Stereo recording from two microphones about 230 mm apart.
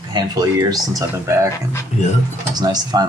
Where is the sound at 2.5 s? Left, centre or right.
Centre.